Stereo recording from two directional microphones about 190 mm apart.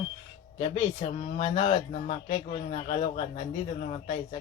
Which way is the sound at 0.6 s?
30° left (ahead or behind).